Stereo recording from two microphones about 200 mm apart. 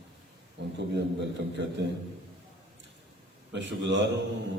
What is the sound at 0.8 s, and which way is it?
Speech, 60° right (ahead or behind).